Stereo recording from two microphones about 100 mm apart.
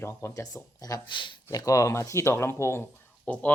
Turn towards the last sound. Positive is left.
turn(degrees=15)  # may be behind; listen again after turning